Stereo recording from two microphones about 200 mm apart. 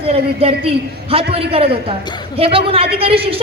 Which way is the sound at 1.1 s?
30° right (ahead or behind).